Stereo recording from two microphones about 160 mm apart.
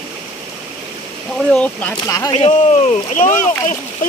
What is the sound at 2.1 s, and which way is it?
Speech, 20° left (ahead or behind).